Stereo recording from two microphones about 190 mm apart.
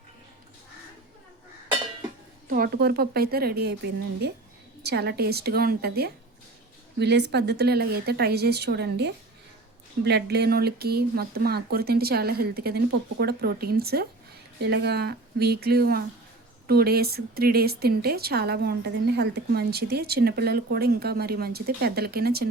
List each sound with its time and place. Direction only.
2.5 s speech: 55° right (ahead or behind)